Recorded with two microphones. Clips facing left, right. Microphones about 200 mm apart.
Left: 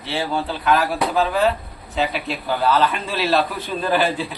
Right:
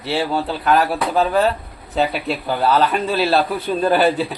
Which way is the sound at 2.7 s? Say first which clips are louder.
Right 3 dB; 35° right (ahead or behind).